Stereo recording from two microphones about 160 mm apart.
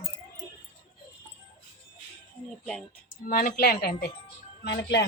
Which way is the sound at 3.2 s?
70° left (ahead or behind).